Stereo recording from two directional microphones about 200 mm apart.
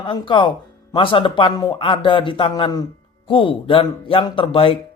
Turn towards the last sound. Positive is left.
turn(degrees=25)  # may be behind; listen again after turning